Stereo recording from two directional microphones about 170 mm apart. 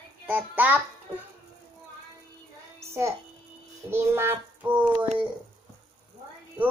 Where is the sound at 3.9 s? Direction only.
15° right (ahead or behind).